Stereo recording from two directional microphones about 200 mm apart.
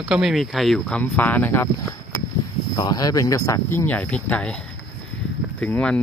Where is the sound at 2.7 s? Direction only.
20° left (ahead or behind).